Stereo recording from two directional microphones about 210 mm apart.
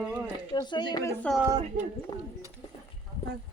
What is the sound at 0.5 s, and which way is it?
Speech, 20° left (ahead or behind).